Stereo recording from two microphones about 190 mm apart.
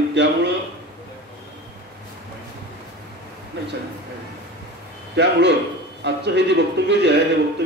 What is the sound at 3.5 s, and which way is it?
Speech, 65° right (ahead or behind).